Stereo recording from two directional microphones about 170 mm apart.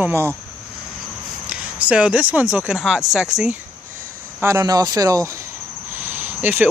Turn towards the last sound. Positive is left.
turn(degrees=-10)  # may be behind; listen again after turning